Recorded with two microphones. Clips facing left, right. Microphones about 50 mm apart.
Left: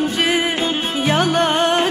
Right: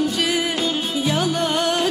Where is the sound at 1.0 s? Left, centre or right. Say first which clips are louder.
Left 6 dB; left.